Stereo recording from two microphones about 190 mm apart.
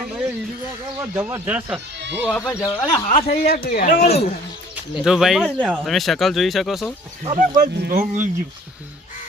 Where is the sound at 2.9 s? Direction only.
30° left (ahead or behind).